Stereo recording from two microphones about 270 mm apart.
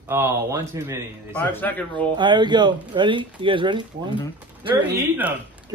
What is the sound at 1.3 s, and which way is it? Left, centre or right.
Speech, centre.